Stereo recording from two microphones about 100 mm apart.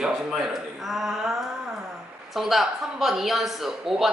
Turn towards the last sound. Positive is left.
turn(degrees=-5)  # may be behind; listen again after turning